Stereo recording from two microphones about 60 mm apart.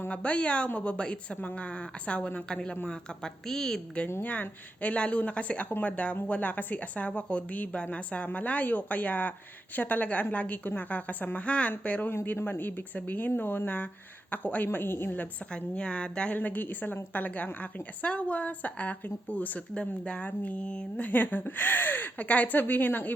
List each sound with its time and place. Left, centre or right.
0.1 s a woman's voice: left; by 3.8 s centre
4.2 s a woman's voice: left
12.1 s speech: left
15.1 s a woman's voice: left
16.4 s a woman's voice: left